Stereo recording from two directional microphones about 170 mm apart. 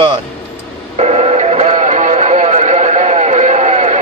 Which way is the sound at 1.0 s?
40° right (ahead or behind).